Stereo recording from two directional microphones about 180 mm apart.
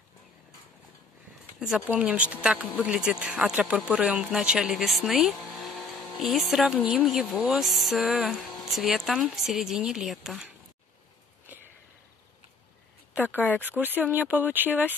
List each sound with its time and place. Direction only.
1.9 s speech: 5° right (ahead or behind)
13.4 s speech: 10° left (ahead or behind)
13.7 s speech: 10° right (ahead or behind)